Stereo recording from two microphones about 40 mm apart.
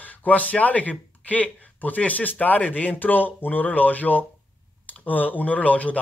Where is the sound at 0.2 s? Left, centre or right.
Left.